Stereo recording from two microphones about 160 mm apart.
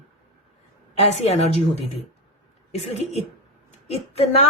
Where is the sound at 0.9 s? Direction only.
40° left (ahead or behind).